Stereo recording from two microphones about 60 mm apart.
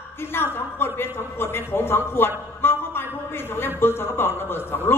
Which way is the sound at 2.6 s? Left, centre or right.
Left.